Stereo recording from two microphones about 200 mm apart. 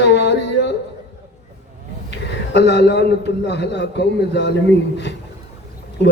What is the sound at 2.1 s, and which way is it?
A man's voice, 60° left (ahead or behind).